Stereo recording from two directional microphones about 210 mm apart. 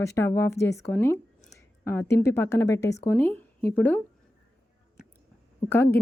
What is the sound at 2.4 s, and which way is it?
A woman's voice, 10° left (ahead or behind).